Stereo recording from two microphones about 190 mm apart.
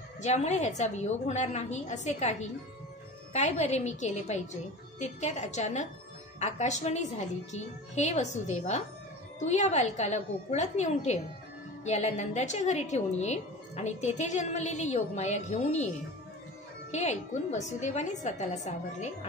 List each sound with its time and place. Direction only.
0.2 s a woman's voice: 35° left (ahead or behind)
16.9 s a woman's voice: 35° left (ahead or behind)